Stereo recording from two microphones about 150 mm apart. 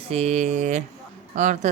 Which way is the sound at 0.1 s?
45° right (ahead or behind).